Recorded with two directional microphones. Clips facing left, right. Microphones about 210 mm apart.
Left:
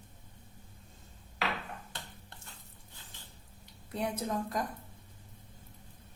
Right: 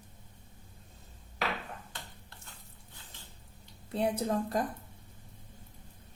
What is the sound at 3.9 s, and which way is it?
Speech, 30° right (ahead or behind).